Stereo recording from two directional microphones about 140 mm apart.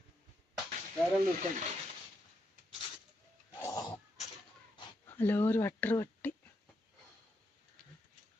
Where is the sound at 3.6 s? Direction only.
25° left (ahead or behind).